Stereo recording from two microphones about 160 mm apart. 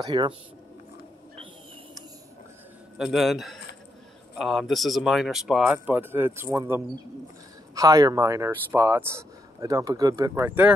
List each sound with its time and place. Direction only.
0.0 s speech: 30° right (ahead or behind)
3.0 s speech: centre (ahead or behind)
7.7 s speech: 20° right (ahead or behind)